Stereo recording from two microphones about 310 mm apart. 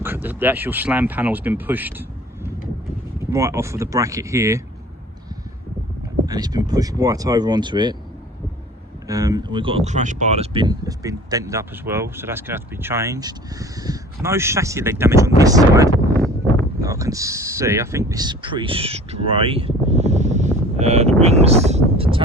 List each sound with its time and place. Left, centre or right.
0.0 s speech: centre
3.2 s speech: centre
6.2 s speech: centre
9.0 s speech: centre